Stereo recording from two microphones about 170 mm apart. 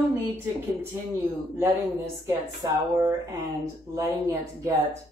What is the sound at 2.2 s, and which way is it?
A woman's voice, 15° right (ahead or behind).